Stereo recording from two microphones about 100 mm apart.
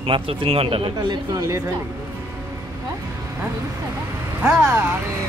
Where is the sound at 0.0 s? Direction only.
65° right (ahead or behind).